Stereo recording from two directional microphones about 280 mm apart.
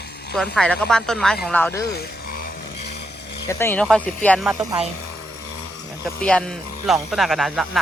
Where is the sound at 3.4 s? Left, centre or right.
Centre.